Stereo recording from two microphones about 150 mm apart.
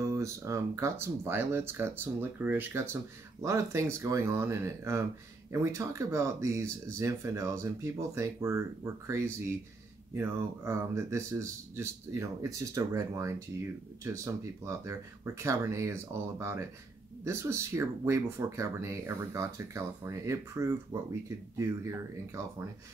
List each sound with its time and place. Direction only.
0.0 s speech: 20° right (ahead or behind)